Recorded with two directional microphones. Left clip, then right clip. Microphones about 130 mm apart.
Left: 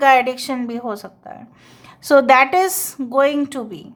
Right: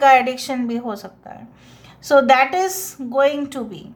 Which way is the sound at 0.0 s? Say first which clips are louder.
Even; 35° left (ahead or behind).